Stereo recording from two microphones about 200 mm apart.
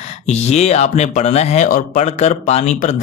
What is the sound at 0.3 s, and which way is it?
Speech, 35° left (ahead or behind).